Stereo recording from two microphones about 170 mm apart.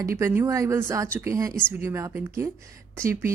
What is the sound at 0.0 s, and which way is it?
Speech, 15° right (ahead or behind).